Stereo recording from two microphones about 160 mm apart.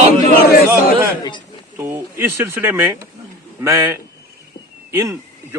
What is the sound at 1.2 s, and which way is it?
Speech, 30° left (ahead or behind).